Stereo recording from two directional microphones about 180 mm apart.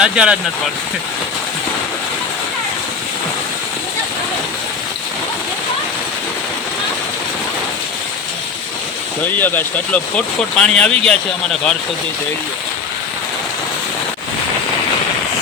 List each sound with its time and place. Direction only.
0.0 s speech: 5° right (ahead or behind)
9.4 s speech: 10° left (ahead or behind)